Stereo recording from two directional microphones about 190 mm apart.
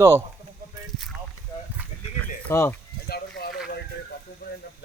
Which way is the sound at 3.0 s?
55° left (ahead or behind).